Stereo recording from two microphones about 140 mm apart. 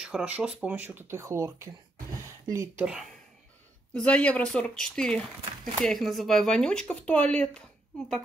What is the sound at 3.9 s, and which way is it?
A woman's voice, 10° left (ahead or behind).